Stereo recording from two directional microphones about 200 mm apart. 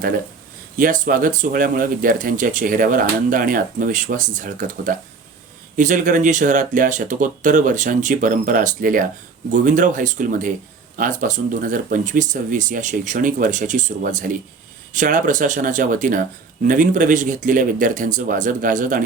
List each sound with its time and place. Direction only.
0.8 s speech: 45° right (ahead or behind)